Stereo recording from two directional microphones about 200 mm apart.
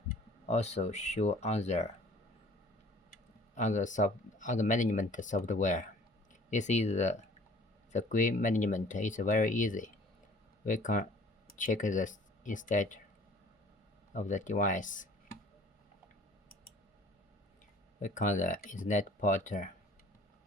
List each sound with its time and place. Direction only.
0.1 s speech: 35° left (ahead or behind)
3.1 s speech: 35° left (ahead or behind)
14.1 s speech: 40° left (ahead or behind)
18.0 s speech: 40° left (ahead or behind)